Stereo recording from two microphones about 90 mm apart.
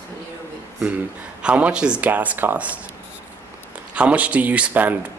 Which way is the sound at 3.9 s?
15° right (ahead or behind).